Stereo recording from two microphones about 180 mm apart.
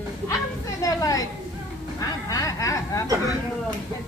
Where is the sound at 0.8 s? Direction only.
20° left (ahead or behind).